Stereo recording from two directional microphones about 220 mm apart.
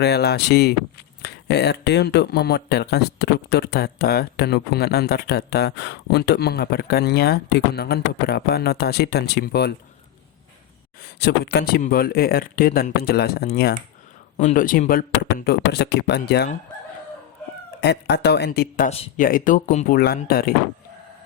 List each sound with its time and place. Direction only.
0.0 s speech: 45° left (ahead or behind)
11.2 s speech: 50° left (ahead or behind)
17.7 s speech: 50° left (ahead or behind)
18.9 s speech: 25° left (ahead or behind)
19.2 s speech: 40° left (ahead or behind)